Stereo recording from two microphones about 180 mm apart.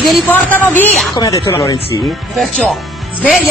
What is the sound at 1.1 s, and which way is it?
Speech, 25° left (ahead or behind).